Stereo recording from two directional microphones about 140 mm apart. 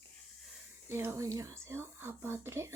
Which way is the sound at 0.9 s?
20° right (ahead or behind).